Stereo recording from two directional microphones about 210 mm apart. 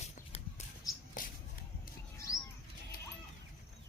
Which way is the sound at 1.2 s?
40° left (ahead or behind).